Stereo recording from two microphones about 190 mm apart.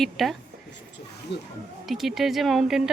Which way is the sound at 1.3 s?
65° left (ahead or behind).